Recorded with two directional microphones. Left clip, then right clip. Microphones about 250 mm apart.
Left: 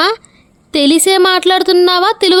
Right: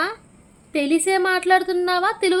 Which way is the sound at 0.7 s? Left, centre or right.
Left.